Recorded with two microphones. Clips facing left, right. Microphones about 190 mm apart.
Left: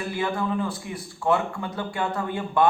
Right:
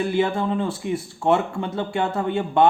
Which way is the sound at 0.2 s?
25° right (ahead or behind).